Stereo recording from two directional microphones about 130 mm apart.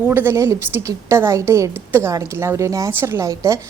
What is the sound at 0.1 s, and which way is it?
A woman's voice, 20° right (ahead or behind).